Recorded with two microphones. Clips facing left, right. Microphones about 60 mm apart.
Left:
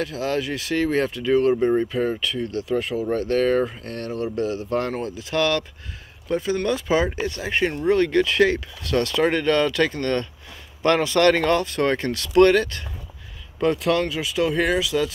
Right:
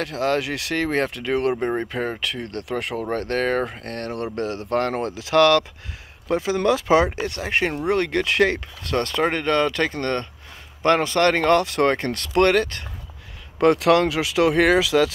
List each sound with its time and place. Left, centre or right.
0.0 s speech: right
2.2 s speech: right
7.2 s speech: right
11.5 s speech: right
11.9 s speech: right
13.6 s speech: right